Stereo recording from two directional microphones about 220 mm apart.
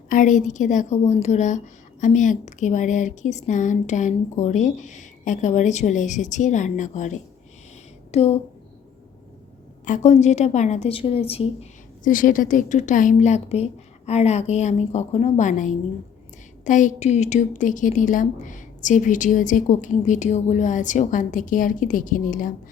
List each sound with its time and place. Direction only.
0.1 s a woman's voice: 35° left (ahead or behind)
9.8 s a woman's voice: 35° left (ahead or behind)